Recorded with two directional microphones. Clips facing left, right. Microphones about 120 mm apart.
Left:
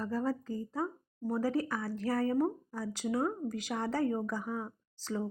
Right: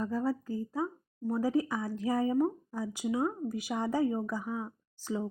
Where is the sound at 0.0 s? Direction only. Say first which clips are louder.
Right 2 dB; 10° right (ahead or behind).